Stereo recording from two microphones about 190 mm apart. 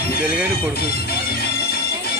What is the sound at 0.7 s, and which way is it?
Music, 55° left (ahead or behind).